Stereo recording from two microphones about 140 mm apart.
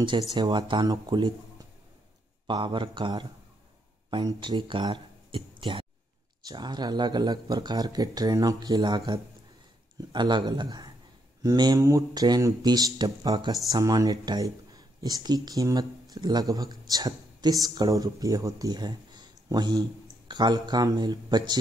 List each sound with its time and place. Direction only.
0.3 s speech: 30° right (ahead or behind)
2.4 s speech: 35° right (ahead or behind)